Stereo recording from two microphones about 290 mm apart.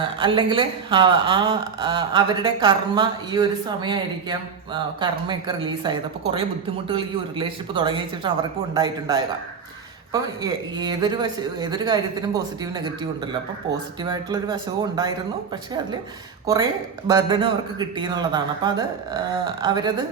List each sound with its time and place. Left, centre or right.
0.0 s speech: centre
14.0 s speech: centre
16.5 s speech: centre